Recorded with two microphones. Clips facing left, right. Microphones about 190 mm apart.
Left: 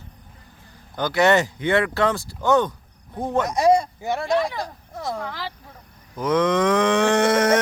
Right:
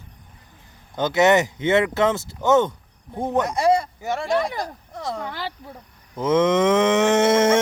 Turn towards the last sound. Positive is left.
turn(degrees=-25)  # may be behind; listen again after turning